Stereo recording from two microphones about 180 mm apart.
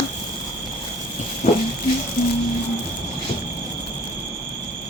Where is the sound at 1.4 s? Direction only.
35° left (ahead or behind).